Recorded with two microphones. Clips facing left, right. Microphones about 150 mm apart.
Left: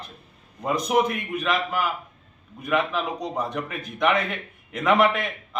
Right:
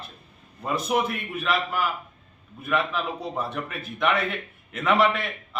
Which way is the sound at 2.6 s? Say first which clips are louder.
Left 2 dB; 15° left (ahead or behind).